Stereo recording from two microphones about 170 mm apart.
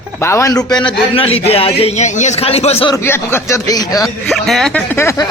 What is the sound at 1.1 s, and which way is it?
A man's voice, 35° left (ahead or behind).